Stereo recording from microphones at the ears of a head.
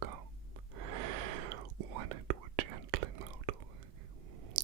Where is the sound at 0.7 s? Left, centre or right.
Right.